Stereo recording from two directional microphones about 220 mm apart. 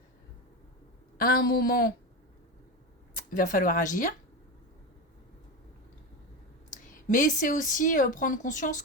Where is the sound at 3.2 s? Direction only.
40° left (ahead or behind).